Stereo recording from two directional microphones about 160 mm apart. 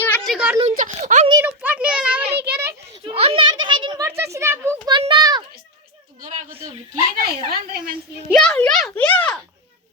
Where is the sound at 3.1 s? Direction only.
35° right (ahead or behind).